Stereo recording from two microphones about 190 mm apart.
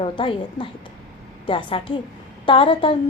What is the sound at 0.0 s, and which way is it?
A woman's voice, 25° left (ahead or behind).